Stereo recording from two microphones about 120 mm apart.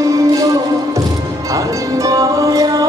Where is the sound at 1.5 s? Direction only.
30° right (ahead or behind).